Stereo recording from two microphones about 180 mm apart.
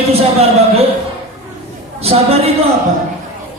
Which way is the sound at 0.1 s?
35° right (ahead or behind).